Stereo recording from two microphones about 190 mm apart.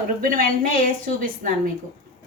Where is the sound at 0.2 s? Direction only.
45° right (ahead or behind).